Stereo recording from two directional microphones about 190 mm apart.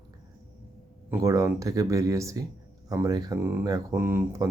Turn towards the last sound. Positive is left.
turn(degrees=-15)  # may be behind; listen again after turning